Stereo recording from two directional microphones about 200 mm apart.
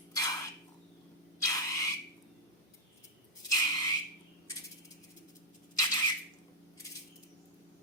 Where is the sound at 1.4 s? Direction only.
15° left (ahead or behind).